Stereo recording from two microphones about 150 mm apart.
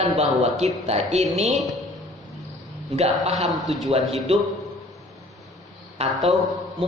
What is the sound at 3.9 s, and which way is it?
Speech, 40° right (ahead or behind).